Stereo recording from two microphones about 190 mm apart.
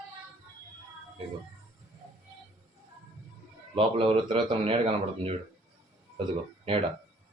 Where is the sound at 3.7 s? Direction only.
30° right (ahead or behind).